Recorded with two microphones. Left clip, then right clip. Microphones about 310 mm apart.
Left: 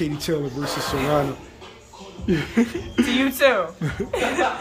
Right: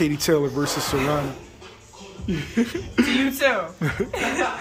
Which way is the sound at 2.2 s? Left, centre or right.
Centre.